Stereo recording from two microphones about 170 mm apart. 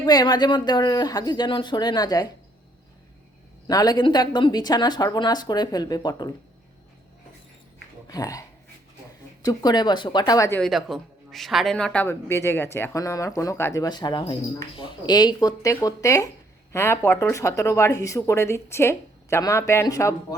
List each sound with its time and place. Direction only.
0.0 s a woman's voice: 25° left (ahead or behind)
3.7 s a woman's voice: 20° left (ahead or behind)
8.0 s a woman's voice: 20° left (ahead or behind)
10.6 s a woman's voice: centre (ahead or behind); by 20.1 s 15° left (ahead or behind)